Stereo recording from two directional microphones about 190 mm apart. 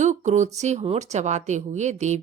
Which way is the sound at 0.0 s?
40° right (ahead or behind).